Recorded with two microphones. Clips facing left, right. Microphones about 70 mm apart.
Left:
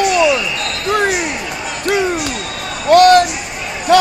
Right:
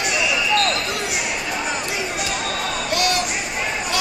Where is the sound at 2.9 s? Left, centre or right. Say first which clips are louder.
Left 17 dB; left.